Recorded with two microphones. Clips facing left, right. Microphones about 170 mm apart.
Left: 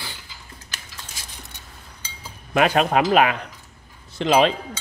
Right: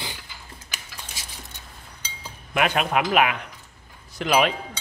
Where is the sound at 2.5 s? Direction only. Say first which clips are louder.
Left 4 dB; 35° left (ahead or behind).